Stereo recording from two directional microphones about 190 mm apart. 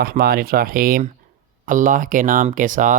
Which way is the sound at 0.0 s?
50° right (ahead or behind).